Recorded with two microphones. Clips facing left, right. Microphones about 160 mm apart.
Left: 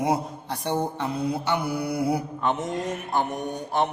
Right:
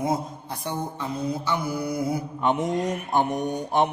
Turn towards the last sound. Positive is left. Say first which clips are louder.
# right 3 dB
turn(degrees=-20)  # may be behind; listen again after turning